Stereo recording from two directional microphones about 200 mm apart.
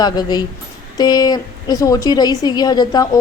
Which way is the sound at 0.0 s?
20° left (ahead or behind).